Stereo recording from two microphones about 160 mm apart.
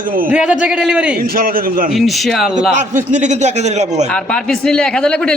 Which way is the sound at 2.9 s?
50° right (ahead or behind).